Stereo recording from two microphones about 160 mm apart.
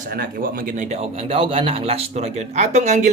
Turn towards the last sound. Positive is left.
turn(degrees=-50)  # may be behind; listen again after turning